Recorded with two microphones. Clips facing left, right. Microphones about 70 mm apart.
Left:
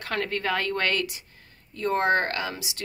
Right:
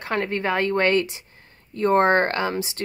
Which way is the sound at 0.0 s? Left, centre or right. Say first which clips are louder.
Right 4 dB; right.